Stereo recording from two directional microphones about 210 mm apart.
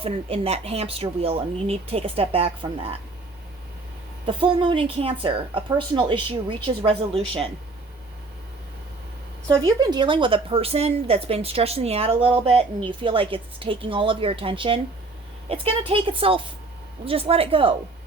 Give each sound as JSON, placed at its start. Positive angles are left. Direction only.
{"t": 0.0, "sound": "a woman's voice", "side_deg": -30}
{"t": 4.3, "sound": "a woman's voice", "side_deg": -25}
{"t": 9.6, "sound": "a woman's voice", "side_deg": -20}